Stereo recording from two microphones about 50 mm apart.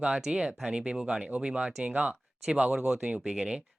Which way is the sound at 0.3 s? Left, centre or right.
Centre.